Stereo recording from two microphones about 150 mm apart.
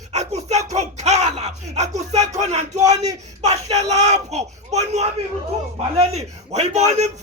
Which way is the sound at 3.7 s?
50° right (ahead or behind).